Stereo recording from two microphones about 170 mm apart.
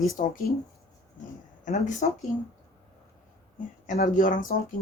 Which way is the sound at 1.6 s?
50° left (ahead or behind).